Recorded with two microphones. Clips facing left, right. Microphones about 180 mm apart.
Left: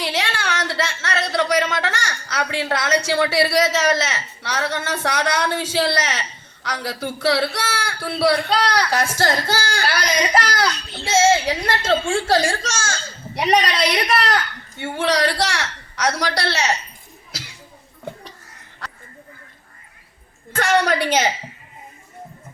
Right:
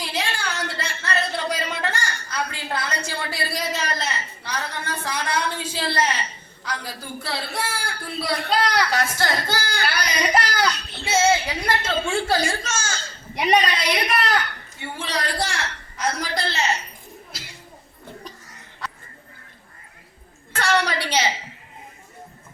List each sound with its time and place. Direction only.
0.0 s a sound: 85° left
11.0 s a woman's voice: 85° left
12.6 s a woman's voice: 90° left
20.6 s a woman's voice: 45° left (ahead or behind)